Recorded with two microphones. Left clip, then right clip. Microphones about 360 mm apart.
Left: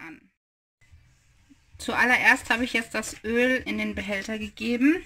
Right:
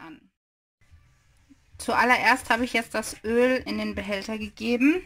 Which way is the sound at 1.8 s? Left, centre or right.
Centre.